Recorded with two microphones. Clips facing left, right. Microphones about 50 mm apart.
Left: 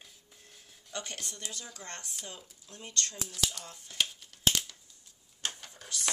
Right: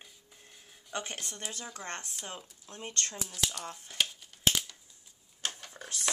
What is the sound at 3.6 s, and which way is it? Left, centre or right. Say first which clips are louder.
Speech: right 6 dB; right.